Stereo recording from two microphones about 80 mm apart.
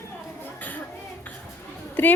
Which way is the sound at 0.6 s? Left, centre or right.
Left.